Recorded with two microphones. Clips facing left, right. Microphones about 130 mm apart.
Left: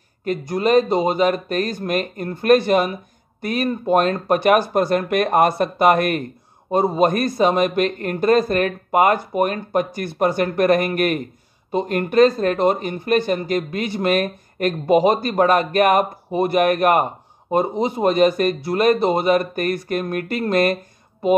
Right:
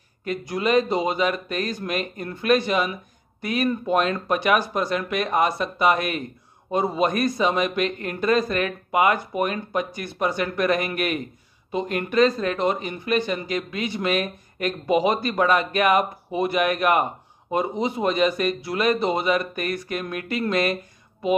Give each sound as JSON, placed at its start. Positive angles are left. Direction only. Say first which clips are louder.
{"t": 0.2, "sound": "speech", "louder": "left 5 dB", "side_deg": 40}